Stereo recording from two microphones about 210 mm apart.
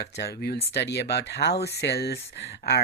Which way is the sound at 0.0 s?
50° left (ahead or behind).